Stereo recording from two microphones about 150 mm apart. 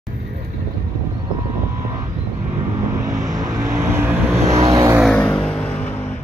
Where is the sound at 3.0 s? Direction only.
20° right (ahead or behind).